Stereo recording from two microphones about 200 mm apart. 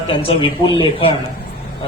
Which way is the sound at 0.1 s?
25° left (ahead or behind).